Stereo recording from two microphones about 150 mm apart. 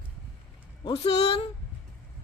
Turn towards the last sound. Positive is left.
turn(degrees=40)  # may be behind; listen again after turning